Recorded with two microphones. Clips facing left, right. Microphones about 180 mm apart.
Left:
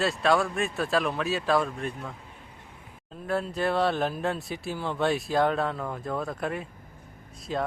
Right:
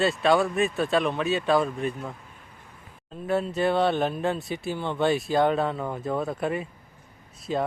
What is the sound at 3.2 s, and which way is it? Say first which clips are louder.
Speech: right 3 dB; centre (ahead or behind).